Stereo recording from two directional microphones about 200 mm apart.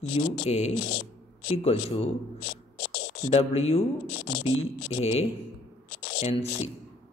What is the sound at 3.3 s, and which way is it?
Speech, 30° left (ahead or behind).